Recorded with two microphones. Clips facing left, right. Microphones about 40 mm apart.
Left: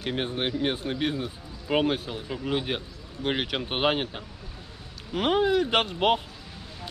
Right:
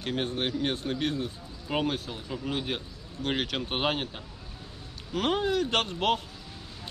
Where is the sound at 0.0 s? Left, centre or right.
Centre.